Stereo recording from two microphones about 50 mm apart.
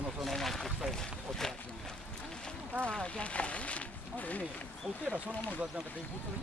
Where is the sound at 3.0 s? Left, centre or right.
Left.